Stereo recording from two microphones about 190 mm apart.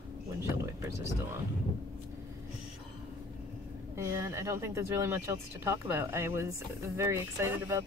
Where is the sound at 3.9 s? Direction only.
15° right (ahead or behind).